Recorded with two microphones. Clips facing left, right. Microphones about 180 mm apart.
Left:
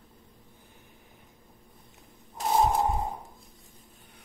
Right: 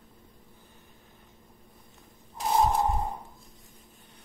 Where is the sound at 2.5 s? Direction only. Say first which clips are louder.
Even; 10° left (ahead or behind).